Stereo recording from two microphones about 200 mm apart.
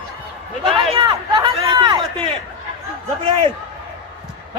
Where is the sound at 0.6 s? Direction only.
30° right (ahead or behind).